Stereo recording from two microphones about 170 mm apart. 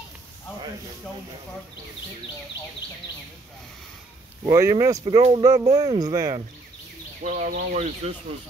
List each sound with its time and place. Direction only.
4.5 s speech: 20° right (ahead or behind)
7.2 s speech: 45° right (ahead or behind)